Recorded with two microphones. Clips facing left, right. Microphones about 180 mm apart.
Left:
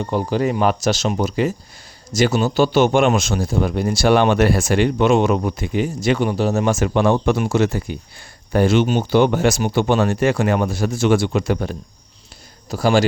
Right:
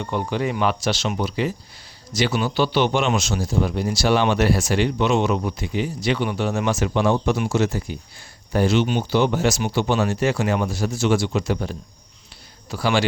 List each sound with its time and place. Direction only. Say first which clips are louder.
0.0 s speech: left 4 dB; 35° left (ahead or behind); by 11.8 s 55° left (ahead or behind)
12.7 s speech: left 5 dB; 40° left (ahead or behind)